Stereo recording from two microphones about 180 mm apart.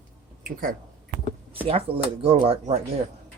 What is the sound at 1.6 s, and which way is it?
Speech, 30° right (ahead or behind).